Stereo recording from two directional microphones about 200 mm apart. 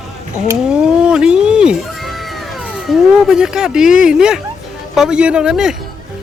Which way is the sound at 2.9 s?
5° right (ahead or behind).